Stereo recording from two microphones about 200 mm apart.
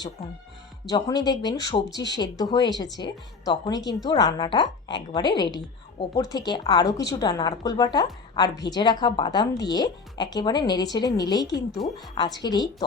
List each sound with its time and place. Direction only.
0.9 s a woman's voice: 20° left (ahead or behind)
12.5 s a woman's voice: 20° left (ahead or behind)